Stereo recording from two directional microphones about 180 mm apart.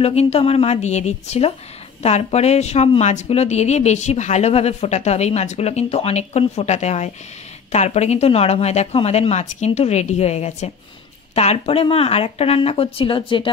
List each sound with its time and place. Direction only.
0.0 s speech: 35° left (ahead or behind)